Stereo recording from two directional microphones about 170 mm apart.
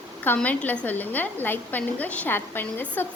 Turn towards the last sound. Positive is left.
turn(degrees=10)  # may be behind; listen again after turning